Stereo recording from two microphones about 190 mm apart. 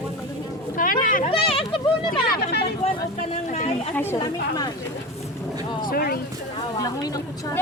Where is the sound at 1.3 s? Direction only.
30° left (ahead or behind).